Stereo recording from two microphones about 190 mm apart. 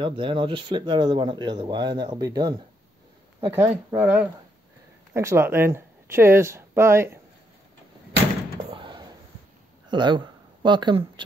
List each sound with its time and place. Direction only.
0.0 s speech: 25° right (ahead or behind)
3.5 s speech: 10° right (ahead or behind)
8.6 s a sound: 25° right (ahead or behind)
9.8 s speech: 25° right (ahead or behind)